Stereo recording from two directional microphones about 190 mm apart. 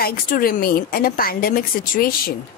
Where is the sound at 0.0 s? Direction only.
50° left (ahead or behind).